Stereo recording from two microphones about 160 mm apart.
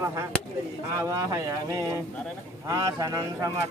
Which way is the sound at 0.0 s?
20° right (ahead or behind).